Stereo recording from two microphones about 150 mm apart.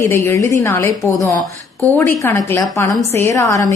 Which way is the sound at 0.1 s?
20° left (ahead or behind).